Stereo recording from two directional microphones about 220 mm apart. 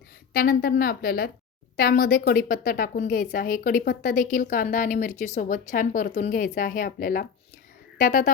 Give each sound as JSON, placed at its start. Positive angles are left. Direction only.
{"t": 0.3, "sound": "a woman's voice", "side_deg": 40}